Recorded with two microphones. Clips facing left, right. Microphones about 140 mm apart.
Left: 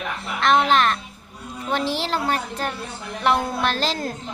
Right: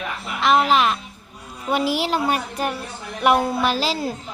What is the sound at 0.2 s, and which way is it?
A child's voice, 5° right (ahead or behind).